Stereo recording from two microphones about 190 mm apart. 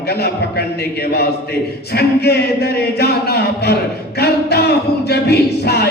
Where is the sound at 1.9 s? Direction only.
55° left (ahead or behind).